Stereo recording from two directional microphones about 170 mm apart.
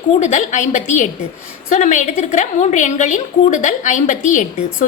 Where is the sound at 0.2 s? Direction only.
45° left (ahead or behind).